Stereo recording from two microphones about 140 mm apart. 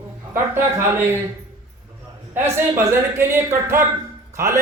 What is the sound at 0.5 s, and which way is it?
Speech, 15° right (ahead or behind).